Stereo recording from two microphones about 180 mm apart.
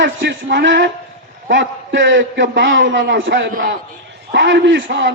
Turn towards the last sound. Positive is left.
turn(degrees=-80)